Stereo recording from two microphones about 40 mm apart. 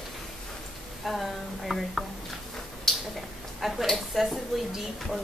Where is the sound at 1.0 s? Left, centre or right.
Centre.